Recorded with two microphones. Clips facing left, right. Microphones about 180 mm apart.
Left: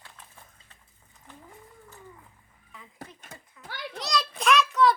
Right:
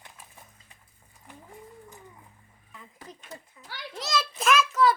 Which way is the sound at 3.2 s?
50° left (ahead or behind).